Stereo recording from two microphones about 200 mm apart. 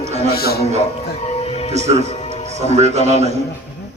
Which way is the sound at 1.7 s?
35° right (ahead or behind).